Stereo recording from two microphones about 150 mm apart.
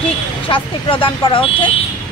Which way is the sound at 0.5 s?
35° left (ahead or behind).